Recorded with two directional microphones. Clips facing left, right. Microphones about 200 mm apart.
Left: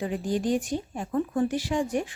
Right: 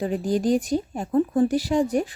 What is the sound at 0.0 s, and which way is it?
Speech, 40° right (ahead or behind).